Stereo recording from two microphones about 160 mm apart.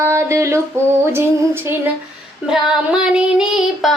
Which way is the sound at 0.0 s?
15° right (ahead or behind).